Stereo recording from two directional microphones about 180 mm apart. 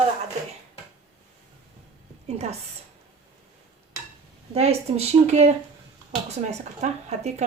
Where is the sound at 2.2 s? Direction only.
35° right (ahead or behind).